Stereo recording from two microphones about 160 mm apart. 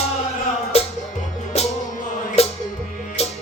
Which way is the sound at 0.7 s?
40° left (ahead or behind).